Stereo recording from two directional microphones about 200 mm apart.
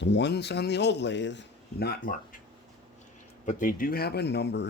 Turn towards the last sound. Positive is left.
turn(degrees=60)  # may be behind; listen again after turning